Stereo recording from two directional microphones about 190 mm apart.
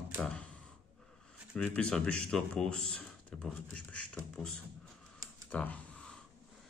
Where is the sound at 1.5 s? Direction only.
5° left (ahead or behind).